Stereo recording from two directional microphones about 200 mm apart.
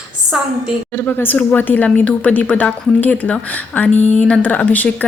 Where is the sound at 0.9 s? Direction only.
10° left (ahead or behind).